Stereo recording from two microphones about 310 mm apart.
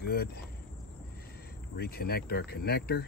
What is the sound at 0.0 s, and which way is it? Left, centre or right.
Insect, left.